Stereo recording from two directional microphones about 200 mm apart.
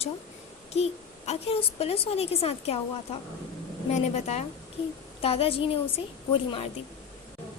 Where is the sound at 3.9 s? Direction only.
35° left (ahead or behind).